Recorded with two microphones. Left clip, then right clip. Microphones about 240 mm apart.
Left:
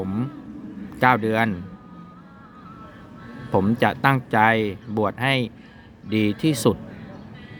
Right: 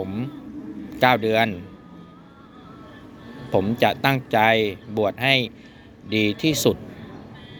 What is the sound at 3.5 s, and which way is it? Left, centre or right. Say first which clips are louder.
Speech: right 1 dB; left.